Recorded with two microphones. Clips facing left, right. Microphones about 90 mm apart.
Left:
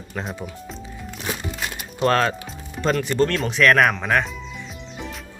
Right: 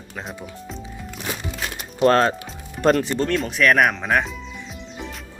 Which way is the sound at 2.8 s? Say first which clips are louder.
Right 5 dB; 60° right (ahead or behind).